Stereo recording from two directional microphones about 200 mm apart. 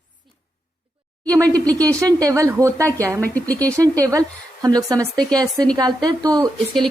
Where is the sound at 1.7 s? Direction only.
5° left (ahead or behind).